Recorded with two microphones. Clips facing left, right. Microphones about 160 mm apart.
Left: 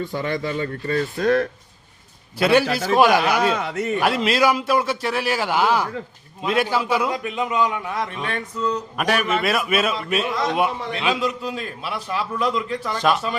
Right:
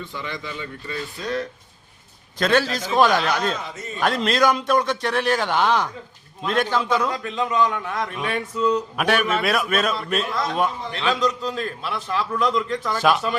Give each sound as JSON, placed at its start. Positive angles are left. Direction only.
{"t": 0.0, "sound": "speech", "side_deg": 45}
{"t": 2.4, "sound": "a man's voice", "side_deg": 10}
{"t": 3.5, "sound": "a man's voice", "side_deg": 65}
{"t": 4.0, "sound": "a man's voice", "side_deg": 5}
{"t": 9.0, "sound": "a man's voice", "side_deg": 0}